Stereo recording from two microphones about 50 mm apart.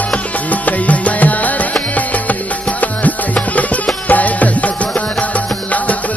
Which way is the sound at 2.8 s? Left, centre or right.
Left.